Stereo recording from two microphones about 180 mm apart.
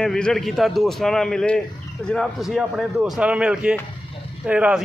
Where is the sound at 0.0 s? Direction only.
5° left (ahead or behind).